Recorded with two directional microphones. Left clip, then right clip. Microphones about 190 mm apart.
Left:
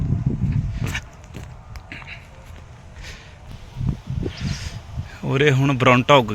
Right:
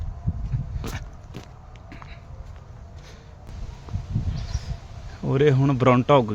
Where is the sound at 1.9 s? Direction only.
Centre (ahead or behind).